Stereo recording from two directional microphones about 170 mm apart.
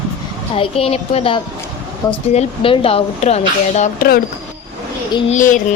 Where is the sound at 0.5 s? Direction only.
35° left (ahead or behind).